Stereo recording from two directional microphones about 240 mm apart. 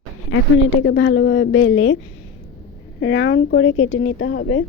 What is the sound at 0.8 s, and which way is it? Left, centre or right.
Speech, left.